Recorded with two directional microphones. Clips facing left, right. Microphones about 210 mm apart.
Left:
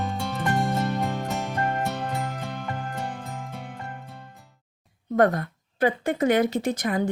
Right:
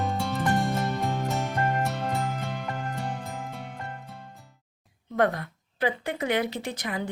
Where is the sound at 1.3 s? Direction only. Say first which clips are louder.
Even; centre (ahead or behind).